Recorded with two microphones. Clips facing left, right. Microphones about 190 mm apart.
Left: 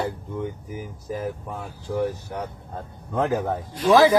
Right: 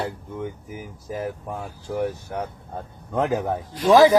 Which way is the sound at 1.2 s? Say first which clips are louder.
Right 1 dB; 5° right (ahead or behind).